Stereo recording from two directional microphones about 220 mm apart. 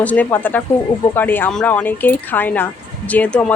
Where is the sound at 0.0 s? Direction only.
5° left (ahead or behind).